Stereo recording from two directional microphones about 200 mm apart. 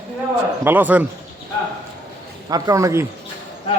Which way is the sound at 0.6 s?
10° right (ahead or behind).